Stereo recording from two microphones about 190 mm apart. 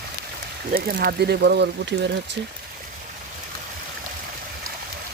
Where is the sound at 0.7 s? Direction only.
55° right (ahead or behind).